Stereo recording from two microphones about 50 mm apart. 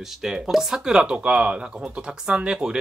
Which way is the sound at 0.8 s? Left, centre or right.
Centre.